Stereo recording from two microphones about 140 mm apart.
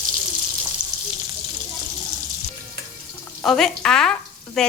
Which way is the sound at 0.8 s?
70° right (ahead or behind).